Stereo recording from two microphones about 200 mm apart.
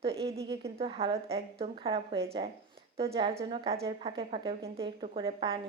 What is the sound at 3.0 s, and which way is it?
Speech, 20° right (ahead or behind).